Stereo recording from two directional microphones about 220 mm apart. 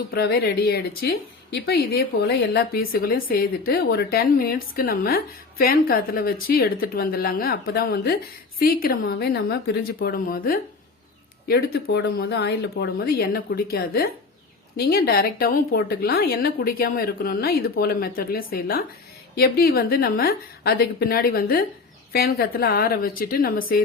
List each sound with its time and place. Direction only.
0.1 s a woman's voice: 45° left (ahead or behind)